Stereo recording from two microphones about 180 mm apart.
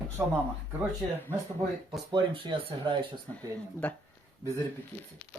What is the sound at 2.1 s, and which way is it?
Speech, 30° right (ahead or behind).